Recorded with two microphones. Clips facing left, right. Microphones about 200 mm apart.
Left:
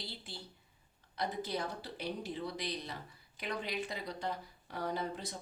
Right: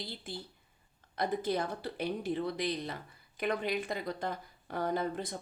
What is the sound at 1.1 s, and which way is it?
A woman's voice, 50° right (ahead or behind).